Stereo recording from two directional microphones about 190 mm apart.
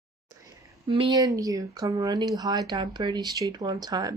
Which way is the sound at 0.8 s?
25° right (ahead or behind).